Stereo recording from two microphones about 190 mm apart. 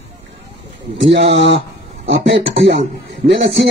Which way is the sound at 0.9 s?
70° right (ahead or behind).